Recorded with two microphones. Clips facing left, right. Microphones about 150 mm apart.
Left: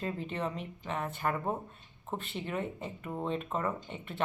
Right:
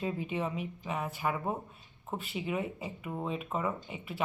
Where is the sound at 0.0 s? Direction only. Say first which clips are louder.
Right 1 dB; 10° right (ahead or behind).